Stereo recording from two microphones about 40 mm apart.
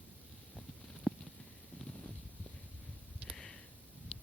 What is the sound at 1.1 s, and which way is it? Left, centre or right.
Clip-clop, left.